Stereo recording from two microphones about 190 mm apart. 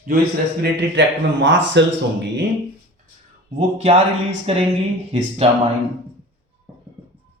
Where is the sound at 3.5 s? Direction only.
30° right (ahead or behind).